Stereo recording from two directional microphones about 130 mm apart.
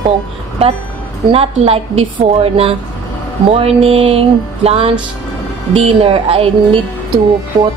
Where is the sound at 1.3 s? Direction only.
50° right (ahead or behind).